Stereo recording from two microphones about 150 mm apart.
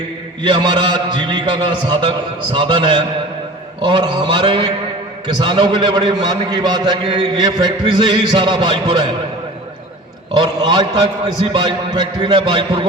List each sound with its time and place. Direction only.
0.4 s a man's voice: 30° right (ahead or behind)
10.3 s a man's voice: 30° right (ahead or behind)